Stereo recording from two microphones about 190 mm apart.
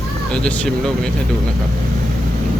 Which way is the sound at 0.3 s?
5° left (ahead or behind).